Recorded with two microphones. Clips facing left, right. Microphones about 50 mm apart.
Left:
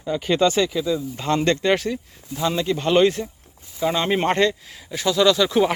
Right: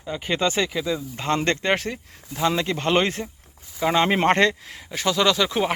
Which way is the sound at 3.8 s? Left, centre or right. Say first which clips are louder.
Right 1 dB; right.